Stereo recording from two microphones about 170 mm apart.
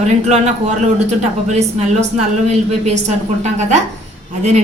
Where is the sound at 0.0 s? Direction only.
40° right (ahead or behind).